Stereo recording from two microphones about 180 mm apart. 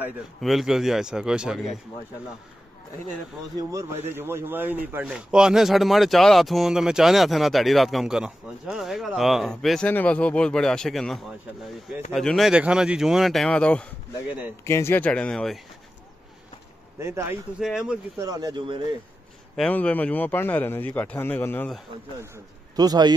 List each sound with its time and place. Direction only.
0.4 s speech: centre (ahead or behind)
4.1 s speech: 15° right (ahead or behind); by 15.6 s 5° left (ahead or behind)
17.0 s speech: 15° right (ahead or behind)
17.6 s speech: centre (ahead or behind)
18.1 s speech: 20° right (ahead or behind)
19.5 s speech: 5° left (ahead or behind)
22.8 s speech: 20° right (ahead or behind)